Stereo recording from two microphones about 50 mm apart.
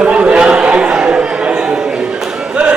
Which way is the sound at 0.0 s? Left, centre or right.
Right.